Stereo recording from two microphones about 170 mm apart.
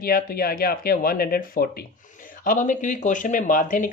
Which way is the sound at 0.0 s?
60° left (ahead or behind).